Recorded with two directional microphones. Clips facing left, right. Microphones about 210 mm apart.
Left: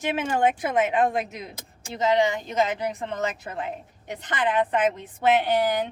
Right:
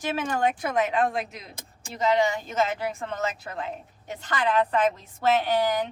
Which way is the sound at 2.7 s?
20° left (ahead or behind).